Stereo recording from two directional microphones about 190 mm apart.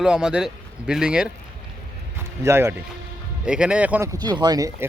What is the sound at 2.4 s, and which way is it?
Speech, 15° right (ahead or behind).